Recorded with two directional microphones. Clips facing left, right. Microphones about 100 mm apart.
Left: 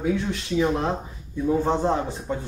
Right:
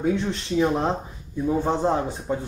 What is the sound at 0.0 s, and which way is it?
Speech, 30° right (ahead or behind).